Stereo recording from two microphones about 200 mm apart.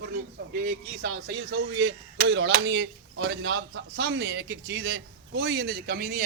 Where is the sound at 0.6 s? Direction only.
55° right (ahead or behind).